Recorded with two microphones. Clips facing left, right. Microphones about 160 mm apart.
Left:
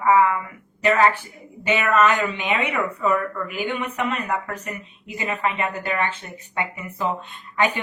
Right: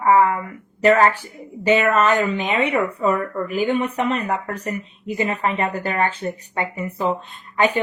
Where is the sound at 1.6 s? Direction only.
35° right (ahead or behind).